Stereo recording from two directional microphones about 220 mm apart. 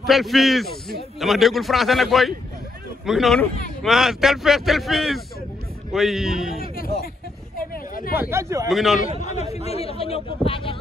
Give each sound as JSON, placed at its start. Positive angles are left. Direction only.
{"t": 0.0, "sound": "a man's voice", "side_deg": 0}
{"t": 7.7, "sound": "a sound", "side_deg": 40}
{"t": 8.2, "sound": "speech", "side_deg": -10}
{"t": 8.6, "sound": "a man's voice", "side_deg": 0}
{"t": 9.2, "sound": "speech", "side_deg": 30}